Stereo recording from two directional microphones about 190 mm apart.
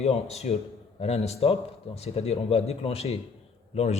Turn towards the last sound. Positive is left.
turn(degrees=35)  # may be behind; listen again after turning